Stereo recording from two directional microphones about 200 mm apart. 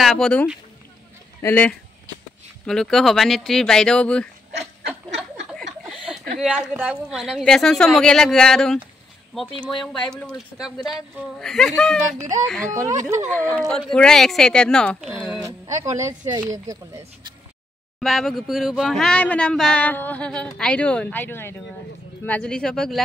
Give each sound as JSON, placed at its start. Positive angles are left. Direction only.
{"t": 0.0, "sound": "speech", "side_deg": 0}
{"t": 5.5, "sound": "chuckle", "side_deg": 0}
{"t": 6.4, "sound": "speech", "side_deg": -5}
{"t": 12.2, "sound": "speech", "side_deg": -15}
{"t": 13.3, "sound": "speech", "side_deg": 5}
{"t": 15.6, "sound": "speech", "side_deg": -15}
{"t": 18.0, "sound": "speech", "side_deg": 0}